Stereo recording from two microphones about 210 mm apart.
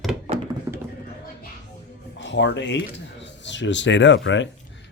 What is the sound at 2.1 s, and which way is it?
Speech, 60° left (ahead or behind).